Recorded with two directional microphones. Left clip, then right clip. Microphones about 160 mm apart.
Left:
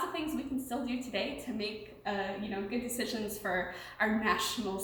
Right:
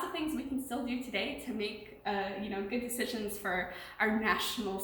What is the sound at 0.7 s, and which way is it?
A woman's voice, 20° left (ahead or behind).